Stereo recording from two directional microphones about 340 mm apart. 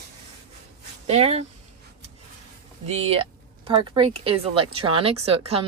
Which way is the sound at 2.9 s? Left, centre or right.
Centre.